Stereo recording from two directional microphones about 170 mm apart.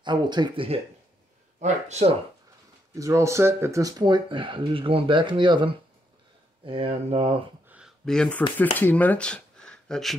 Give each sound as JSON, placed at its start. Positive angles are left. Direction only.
{"t": 0.0, "sound": "speech", "side_deg": -25}
{"t": 1.6, "sound": "speech", "side_deg": -40}
{"t": 3.0, "sound": "speech", "side_deg": -15}
{"t": 7.6, "sound": "a sound", "side_deg": -10}
{"t": 8.0, "sound": "speech", "side_deg": 5}